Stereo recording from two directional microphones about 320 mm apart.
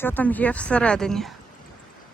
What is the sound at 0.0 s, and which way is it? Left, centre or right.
Speech, centre.